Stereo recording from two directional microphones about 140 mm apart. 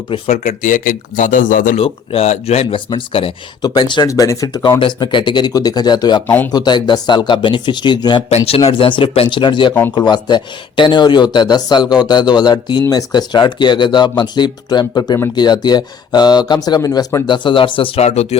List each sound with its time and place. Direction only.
0.3 s speech: 60° left (ahead or behind); by 1.8 s 75° left (ahead or behind)
1.8 s speech: 50° left (ahead or behind); by 6.2 s 30° left (ahead or behind)
6.2 s speech: 15° left (ahead or behind)
6.5 s speech: 30° left (ahead or behind)
8.3 s speech: 45° left (ahead or behind); by 17.2 s 25° left (ahead or behind)
17.2 s speech: 35° left (ahead or behind); by 18.3 s 50° left (ahead or behind)